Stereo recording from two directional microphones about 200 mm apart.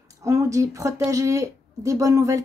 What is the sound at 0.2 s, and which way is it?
Speech, 15° right (ahead or behind).